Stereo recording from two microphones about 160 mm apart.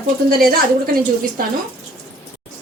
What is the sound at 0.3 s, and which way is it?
Speech, 65° right (ahead or behind).